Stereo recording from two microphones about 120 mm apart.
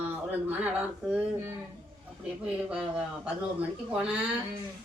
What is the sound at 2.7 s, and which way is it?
Speech, 10° right (ahead or behind).